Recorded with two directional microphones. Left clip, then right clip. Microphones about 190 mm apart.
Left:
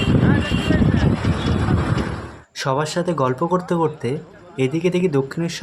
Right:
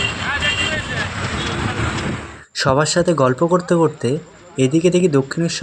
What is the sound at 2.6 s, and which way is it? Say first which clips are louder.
Speech: right 5 dB; 25° right (ahead or behind).